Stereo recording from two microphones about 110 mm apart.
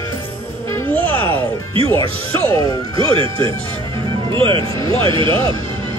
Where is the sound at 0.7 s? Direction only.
20° left (ahead or behind).